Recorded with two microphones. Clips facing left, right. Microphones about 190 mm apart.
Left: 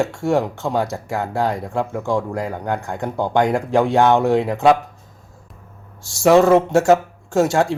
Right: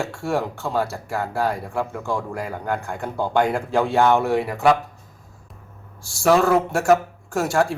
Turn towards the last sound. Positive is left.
turn(degrees=25)  # may be behind; listen again after turning